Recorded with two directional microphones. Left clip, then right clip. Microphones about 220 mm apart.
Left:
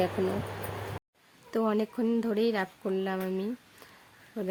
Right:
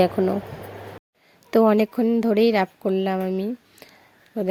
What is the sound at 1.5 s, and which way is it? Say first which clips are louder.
A woman's voice: right 11 dB; 35° right (ahead or behind).